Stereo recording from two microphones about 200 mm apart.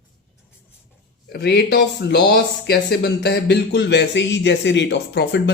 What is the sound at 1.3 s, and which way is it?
Speech, 55° left (ahead or behind).